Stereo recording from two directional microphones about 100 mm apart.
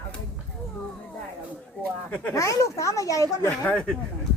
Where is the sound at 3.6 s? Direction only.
10° left (ahead or behind).